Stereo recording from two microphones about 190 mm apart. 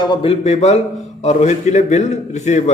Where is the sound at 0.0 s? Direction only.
25° left (ahead or behind).